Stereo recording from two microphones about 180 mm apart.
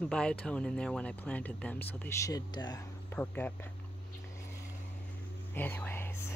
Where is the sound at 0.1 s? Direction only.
5° left (ahead or behind); by 2.8 s 20° left (ahead or behind).